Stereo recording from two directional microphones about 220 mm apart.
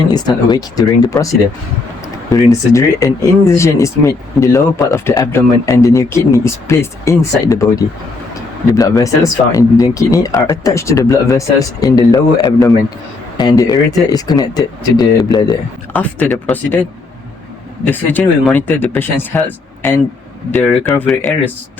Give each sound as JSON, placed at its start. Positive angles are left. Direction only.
{"t": 0.1, "sound": "speech", "side_deg": 20}
{"t": 2.3, "sound": "speech", "side_deg": 15}
{"t": 17.8, "sound": "speech", "side_deg": 10}